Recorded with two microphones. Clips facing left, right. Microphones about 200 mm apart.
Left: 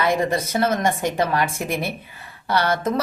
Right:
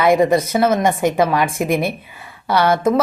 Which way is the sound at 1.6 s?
15° right (ahead or behind).